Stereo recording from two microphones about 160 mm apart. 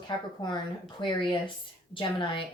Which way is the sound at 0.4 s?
30° left (ahead or behind).